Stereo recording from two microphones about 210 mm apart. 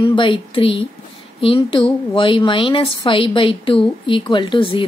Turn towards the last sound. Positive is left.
turn(degrees=25)  # may be behind; listen again after turning